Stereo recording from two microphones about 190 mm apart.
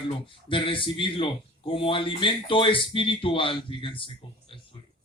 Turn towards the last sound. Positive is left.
turn(degrees=25)  # may be behind; listen again after turning